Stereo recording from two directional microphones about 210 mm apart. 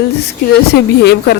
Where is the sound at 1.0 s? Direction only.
50° left (ahead or behind).